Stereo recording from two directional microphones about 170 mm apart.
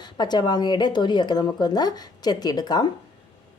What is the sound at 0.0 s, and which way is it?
A woman's voice, 25° left (ahead or behind).